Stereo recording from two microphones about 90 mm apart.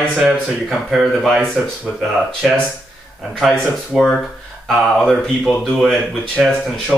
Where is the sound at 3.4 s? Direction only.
5° left (ahead or behind).